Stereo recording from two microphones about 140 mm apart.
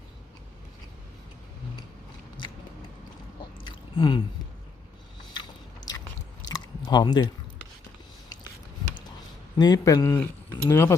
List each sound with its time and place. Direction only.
3.9 s a sound: 30° left (ahead or behind)
5.3 s biting: 30° left (ahead or behind)
6.4 s chewing: 30° left (ahead or behind)
9.6 s speech: 30° left (ahead or behind)